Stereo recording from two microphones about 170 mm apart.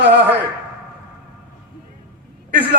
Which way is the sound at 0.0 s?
85° right.